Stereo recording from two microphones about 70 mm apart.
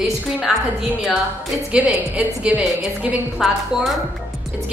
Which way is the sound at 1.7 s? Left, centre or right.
Centre.